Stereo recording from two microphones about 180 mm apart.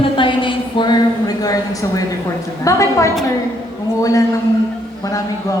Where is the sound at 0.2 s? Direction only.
25° left (ahead or behind).